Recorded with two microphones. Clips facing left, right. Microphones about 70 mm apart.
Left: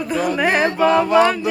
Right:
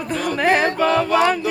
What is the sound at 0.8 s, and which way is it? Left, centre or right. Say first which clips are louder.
Speech: left 3 dB; centre.